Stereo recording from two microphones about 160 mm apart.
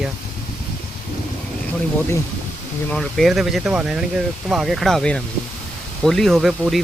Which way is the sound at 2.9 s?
5° left (ahead or behind).